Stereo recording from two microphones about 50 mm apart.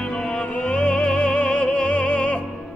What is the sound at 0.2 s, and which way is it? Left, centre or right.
Music, left.